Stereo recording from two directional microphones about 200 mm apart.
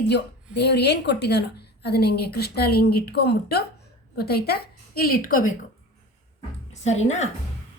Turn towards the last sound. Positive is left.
turn(degrees=35)  # may be behind; listen again after turning